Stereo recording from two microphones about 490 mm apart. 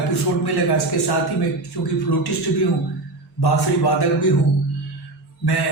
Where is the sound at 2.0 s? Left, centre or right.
Left.